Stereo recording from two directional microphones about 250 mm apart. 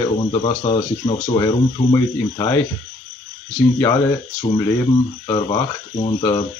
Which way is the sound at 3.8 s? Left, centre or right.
Centre.